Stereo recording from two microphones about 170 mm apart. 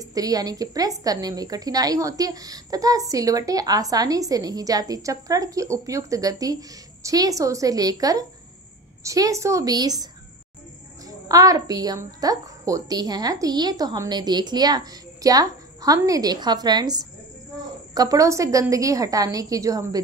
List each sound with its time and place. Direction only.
0.0 s a woman's voice: 20° right (ahead or behind)
11.1 s a woman's voice: 20° right (ahead or behind)